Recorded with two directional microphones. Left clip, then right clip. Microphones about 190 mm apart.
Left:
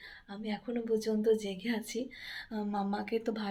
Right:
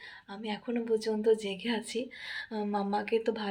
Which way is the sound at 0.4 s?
10° right (ahead or behind).